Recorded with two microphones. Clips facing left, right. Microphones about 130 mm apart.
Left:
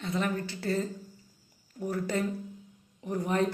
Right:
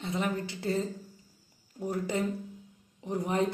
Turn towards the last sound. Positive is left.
turn(degrees=-20)  # may be behind; listen again after turning